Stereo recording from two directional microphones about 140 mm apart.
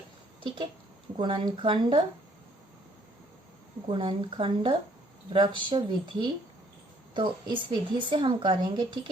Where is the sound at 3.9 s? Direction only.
40° right (ahead or behind).